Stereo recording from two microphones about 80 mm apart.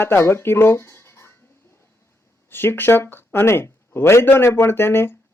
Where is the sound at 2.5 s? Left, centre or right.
Left.